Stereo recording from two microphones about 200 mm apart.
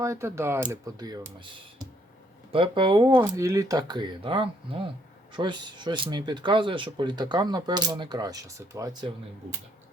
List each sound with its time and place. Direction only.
0.0 s speech: 15° right (ahead or behind)